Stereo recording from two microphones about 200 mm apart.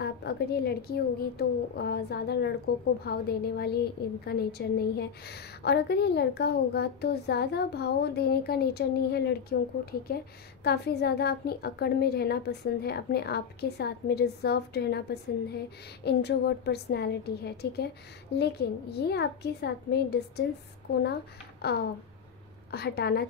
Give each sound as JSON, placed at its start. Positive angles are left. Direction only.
{"t": 0.0, "sound": "a woman's voice", "side_deg": 55}